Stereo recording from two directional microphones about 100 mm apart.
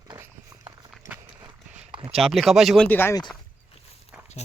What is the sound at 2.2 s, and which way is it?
Speech, centre (ahead or behind).